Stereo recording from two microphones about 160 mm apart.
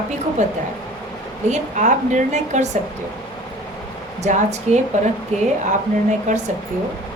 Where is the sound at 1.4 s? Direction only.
50° right (ahead or behind).